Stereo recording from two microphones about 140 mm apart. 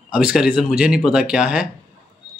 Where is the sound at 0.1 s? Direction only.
5° right (ahead or behind).